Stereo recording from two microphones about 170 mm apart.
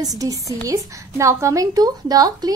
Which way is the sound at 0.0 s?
20° right (ahead or behind).